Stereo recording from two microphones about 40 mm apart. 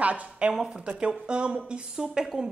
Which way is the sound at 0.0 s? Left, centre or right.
Right.